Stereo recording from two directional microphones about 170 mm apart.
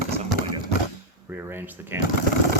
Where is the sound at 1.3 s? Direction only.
10° right (ahead or behind).